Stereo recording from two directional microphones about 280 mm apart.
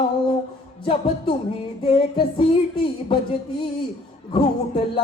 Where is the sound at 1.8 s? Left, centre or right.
Centre.